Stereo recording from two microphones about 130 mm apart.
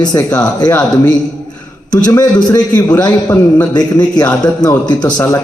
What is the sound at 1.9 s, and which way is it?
Speech, 30° left (ahead or behind).